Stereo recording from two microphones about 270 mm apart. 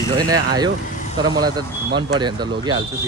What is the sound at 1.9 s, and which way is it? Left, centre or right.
Speech, right.